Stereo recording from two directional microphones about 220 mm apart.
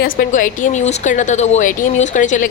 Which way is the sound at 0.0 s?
40° left (ahead or behind).